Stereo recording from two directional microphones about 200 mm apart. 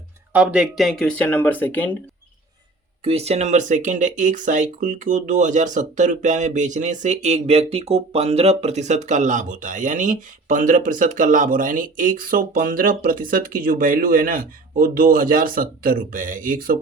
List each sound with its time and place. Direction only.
0.3 s speech: 5° right (ahead or behind)
3.0 s speech: 30° right (ahead or behind)